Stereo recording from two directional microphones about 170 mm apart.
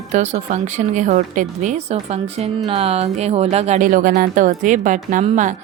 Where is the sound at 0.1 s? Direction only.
40° right (ahead or behind).